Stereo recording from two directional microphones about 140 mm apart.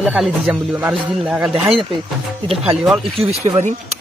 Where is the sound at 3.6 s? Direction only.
55° right (ahead or behind).